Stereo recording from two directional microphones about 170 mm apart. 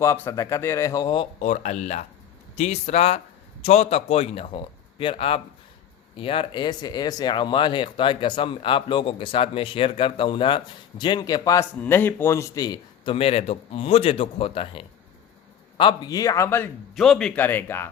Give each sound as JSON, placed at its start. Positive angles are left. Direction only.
{"t": 0.0, "sound": "a man's voice", "side_deg": 20}
{"t": 1.4, "sound": "a man's voice", "side_deg": 45}
{"t": 13.1, "sound": "speech", "side_deg": 35}
{"t": 16.9, "sound": "a man's voice", "side_deg": 0}